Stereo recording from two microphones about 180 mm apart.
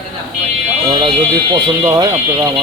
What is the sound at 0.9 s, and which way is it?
Speech, 25° right (ahead or behind).